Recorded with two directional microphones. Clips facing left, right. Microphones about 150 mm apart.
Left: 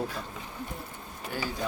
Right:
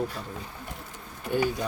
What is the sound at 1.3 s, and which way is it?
Speech, 25° right (ahead or behind).